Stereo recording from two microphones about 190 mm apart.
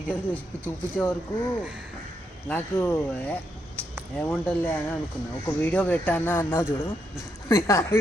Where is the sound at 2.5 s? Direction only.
10° left (ahead or behind).